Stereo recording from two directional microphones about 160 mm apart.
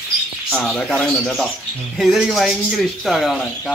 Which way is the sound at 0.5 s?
5° left (ahead or behind).